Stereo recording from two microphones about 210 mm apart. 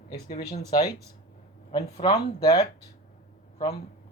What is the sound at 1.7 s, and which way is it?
Speech, 20° left (ahead or behind).